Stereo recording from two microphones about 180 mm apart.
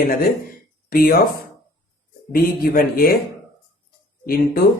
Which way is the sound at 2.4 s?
55° left (ahead or behind).